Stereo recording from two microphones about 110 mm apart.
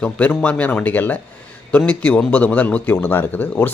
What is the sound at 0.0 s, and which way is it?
Speech, 15° left (ahead or behind).